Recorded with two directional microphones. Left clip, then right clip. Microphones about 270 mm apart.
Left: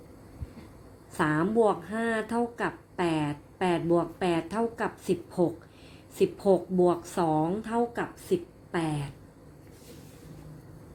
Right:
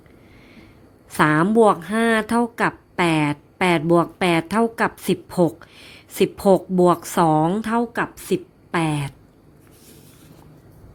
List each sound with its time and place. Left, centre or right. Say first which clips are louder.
1.1 s speech: right 9 dB; right